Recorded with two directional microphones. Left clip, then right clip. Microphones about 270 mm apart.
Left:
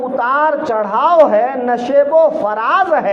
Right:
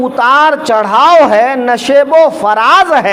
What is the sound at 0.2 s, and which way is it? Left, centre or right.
Speech, right.